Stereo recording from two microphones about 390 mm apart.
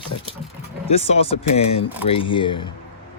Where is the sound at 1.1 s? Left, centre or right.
Centre.